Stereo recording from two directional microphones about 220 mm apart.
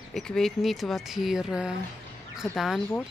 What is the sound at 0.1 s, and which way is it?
Speech, centre (ahead or behind).